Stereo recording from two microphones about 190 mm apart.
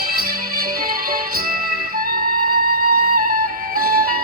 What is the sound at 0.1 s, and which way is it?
Music, 50° right (ahead or behind).